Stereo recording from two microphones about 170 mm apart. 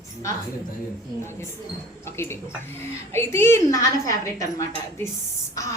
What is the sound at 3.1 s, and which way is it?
A woman's voice, 15° left (ahead or behind).